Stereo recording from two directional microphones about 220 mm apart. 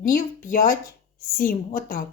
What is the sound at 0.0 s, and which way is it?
A woman's voice, 35° left (ahead or behind).